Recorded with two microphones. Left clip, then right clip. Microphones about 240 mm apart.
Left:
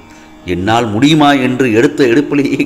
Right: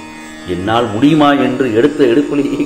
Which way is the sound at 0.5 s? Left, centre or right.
Left.